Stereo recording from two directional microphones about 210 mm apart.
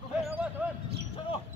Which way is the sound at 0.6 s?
5° right (ahead or behind).